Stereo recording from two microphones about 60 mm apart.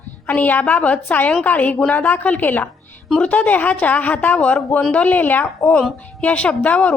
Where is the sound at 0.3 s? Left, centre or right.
Left.